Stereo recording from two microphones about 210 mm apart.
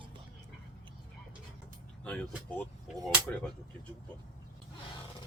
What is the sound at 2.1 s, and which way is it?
Speech, 5° left (ahead or behind).